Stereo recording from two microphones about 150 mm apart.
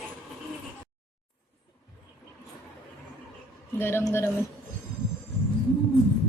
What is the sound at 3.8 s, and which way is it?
Speech, 15° left (ahead or behind).